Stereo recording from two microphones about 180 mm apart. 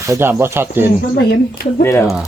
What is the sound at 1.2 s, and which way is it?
Speech, 65° left (ahead or behind).